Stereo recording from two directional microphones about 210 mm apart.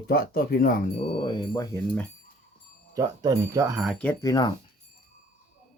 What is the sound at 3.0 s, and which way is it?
Speech, 15° right (ahead or behind).